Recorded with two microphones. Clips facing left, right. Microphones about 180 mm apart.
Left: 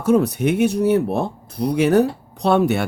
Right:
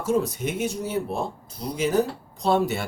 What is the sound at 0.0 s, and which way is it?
Speech, 65° left (ahead or behind).